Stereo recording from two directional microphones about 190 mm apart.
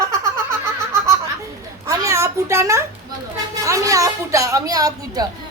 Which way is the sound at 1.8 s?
15° right (ahead or behind).